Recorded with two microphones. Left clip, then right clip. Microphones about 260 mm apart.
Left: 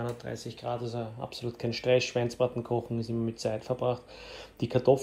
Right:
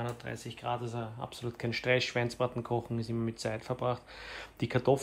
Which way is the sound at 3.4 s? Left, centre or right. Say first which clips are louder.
Left 5 dB; centre.